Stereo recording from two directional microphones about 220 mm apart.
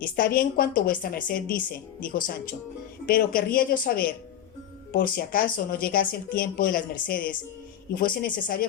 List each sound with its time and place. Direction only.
0.0 s speech: 40° left (ahead or behind)